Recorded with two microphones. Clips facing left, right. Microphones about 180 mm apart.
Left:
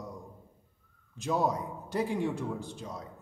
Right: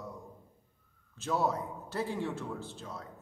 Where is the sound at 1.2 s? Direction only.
15° left (ahead or behind).